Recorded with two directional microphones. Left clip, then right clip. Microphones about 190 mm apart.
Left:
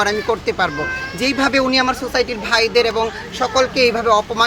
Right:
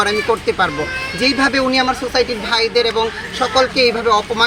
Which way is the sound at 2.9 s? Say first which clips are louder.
Right 2 dB; 5° left (ahead or behind).